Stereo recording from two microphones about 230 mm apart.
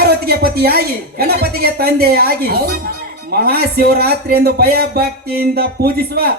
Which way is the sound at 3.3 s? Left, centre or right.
Right.